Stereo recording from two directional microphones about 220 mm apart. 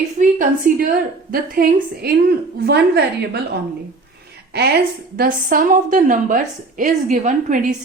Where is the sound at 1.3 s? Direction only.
45° right (ahead or behind).